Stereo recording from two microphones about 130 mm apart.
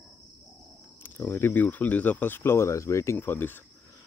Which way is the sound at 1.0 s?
15° left (ahead or behind).